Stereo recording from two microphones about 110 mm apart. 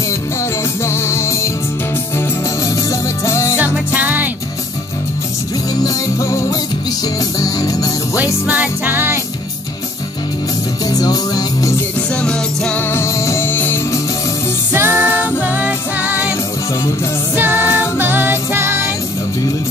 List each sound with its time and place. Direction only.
0.8 s music: 25° left (ahead or behind)
2.9 s music: 25° left (ahead or behind)
3.5 s music: 10° right (ahead or behind)
6.1 s music: 30° left (ahead or behind)
8.5 s music: 15° right (ahead or behind)
10.9 s music: 35° left (ahead or behind)
12.2 s music: 10° left (ahead or behind)
12.9 s music: 25° left (ahead or behind)
14.7 s music: 20° right (ahead or behind)
17.6 s music: 15° right (ahead or behind)